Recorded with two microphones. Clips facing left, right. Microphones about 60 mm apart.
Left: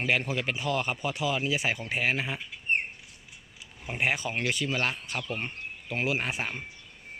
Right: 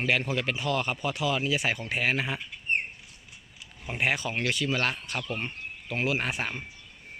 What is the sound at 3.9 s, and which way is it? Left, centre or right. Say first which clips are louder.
Speech: right 1 dB; left.